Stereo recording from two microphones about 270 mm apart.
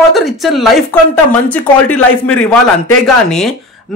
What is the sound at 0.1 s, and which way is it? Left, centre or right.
Speech, centre.